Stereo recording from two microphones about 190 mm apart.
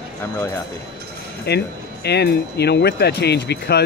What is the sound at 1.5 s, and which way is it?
Speech, 60° left (ahead or behind).